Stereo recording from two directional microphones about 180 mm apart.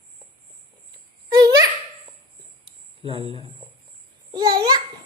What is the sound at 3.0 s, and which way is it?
Speech, 30° right (ahead or behind).